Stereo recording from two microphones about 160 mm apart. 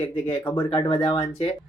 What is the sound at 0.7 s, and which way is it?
Speech, 35° left (ahead or behind).